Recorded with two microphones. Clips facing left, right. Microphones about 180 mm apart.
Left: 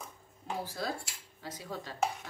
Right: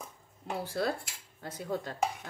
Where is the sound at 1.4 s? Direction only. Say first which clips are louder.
Right 6 dB; 55° right (ahead or behind).